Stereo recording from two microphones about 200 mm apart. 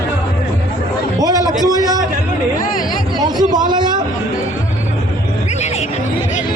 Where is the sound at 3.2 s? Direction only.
20° right (ahead or behind).